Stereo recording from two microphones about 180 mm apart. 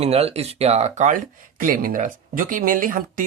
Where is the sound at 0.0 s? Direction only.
35° right (ahead or behind).